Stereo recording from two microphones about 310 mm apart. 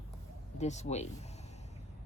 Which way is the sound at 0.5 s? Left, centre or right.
Left.